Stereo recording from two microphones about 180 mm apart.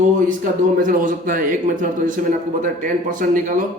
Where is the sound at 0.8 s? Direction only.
45° right (ahead or behind).